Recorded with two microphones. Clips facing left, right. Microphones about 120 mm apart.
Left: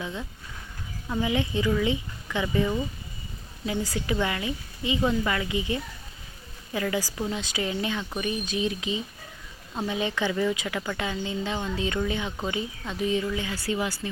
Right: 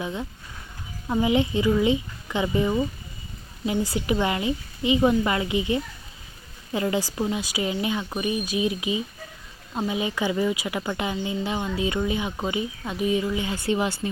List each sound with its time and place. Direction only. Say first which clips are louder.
0.0 s speech: right 4 dB; 15° right (ahead or behind)
7.3 s speech: right 3 dB; 10° right (ahead or behind)